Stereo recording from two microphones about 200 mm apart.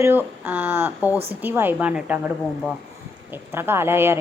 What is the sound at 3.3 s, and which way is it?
Speech, 10° right (ahead or behind).